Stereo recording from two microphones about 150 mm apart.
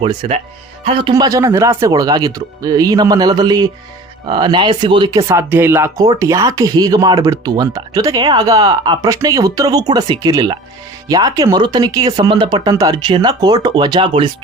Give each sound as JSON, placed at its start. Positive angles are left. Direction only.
{"t": 0.0, "sound": "speech", "side_deg": -30}
{"t": 1.1, "sound": "speech", "side_deg": -25}